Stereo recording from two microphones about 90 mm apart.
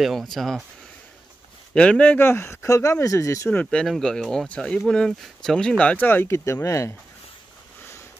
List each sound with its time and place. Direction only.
0.0 s speech: centre (ahead or behind)
1.7 s speech: 10° left (ahead or behind); by 3.4 s 35° left (ahead or behind)
3.4 s speech: 10° left (ahead or behind)
6.2 s speech: 30° left (ahead or behind)